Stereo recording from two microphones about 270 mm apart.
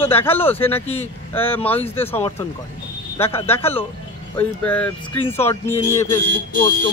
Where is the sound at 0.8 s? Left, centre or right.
Left.